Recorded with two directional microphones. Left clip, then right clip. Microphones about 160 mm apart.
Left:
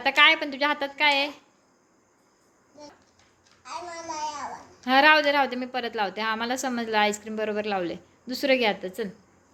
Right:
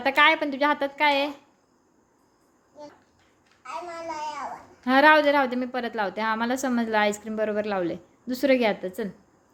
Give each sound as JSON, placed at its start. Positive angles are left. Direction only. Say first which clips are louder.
{"t": 0.0, "sound": "a woman's voice", "louder": "even", "side_deg": -20}
{"t": 3.6, "sound": "a child's voice", "louder": "right 2 dB", "side_deg": -10}